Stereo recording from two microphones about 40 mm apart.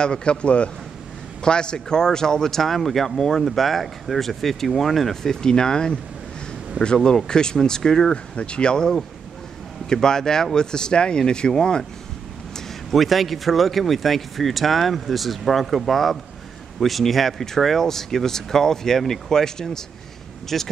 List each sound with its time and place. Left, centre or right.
0.0 s speech: left
7.0 s speech: centre
8.1 s speech: left
12.9 s speech: centre